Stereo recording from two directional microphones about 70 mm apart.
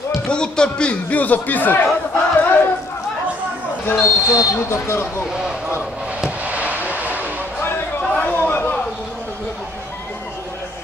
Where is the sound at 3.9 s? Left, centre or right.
Left.